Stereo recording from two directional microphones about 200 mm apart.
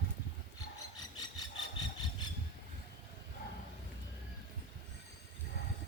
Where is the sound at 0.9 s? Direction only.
20° left (ahead or behind).